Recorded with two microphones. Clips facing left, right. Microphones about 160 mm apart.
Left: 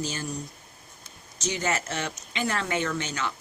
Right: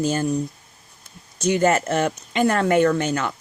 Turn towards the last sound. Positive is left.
turn(degrees=-55)  # may be behind; listen again after turning